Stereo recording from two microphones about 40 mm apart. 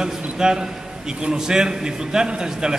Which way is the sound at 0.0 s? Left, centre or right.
Centre.